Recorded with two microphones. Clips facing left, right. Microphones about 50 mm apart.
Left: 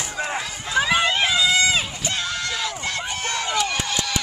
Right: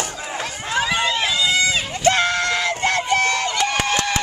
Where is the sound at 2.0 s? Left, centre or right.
Right.